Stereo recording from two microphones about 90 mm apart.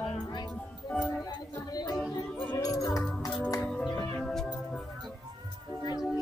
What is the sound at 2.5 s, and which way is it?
Music, 40° left (ahead or behind).